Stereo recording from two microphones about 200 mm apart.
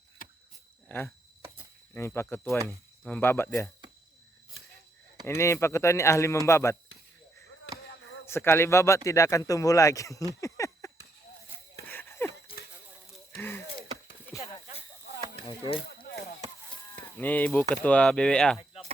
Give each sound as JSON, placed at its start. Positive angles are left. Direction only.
{"t": 0.2, "sound": "a sound", "side_deg": 45}
{"t": 0.9, "sound": "speech", "side_deg": 10}
{"t": 5.2, "sound": "speech", "side_deg": 15}
{"t": 8.3, "sound": "speech", "side_deg": 10}
{"t": 10.4, "sound": "a sound", "side_deg": 15}
{"t": 13.4, "sound": "wheeze", "side_deg": 10}
{"t": 14.3, "sound": "a sound", "side_deg": 15}
{"t": 15.9, "sound": "chop", "side_deg": 50}
{"t": 17.2, "sound": "speech", "side_deg": 10}